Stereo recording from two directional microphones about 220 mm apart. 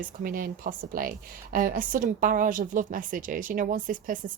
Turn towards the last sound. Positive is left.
turn(degrees=-35)  # may be behind; listen again after turning